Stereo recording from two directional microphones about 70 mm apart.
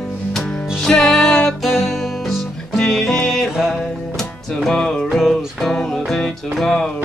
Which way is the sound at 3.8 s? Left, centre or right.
Centre.